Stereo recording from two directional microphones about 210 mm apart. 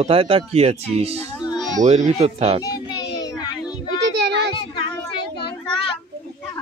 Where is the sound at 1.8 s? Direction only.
35° right (ahead or behind).